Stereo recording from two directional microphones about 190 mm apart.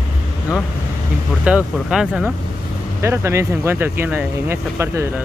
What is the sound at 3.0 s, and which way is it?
Speech, 15° right (ahead or behind).